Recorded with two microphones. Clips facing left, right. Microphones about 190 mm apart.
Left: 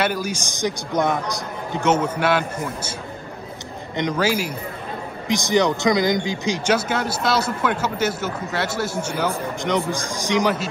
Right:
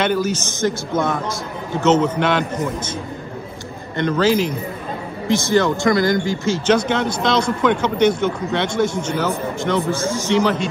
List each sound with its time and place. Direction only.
0.0 s speech: 10° left (ahead or behind)
3.9 s speech: 15° left (ahead or behind)